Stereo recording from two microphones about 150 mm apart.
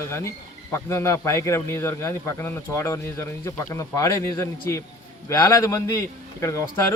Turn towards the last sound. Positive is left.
turn(degrees=20)  # may be behind; listen again after turning